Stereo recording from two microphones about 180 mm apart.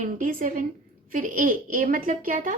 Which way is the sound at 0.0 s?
50° right (ahead or behind).